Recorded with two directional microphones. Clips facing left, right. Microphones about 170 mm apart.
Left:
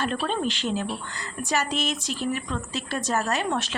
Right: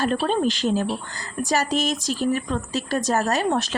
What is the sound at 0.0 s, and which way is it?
Speech, 40° right (ahead or behind).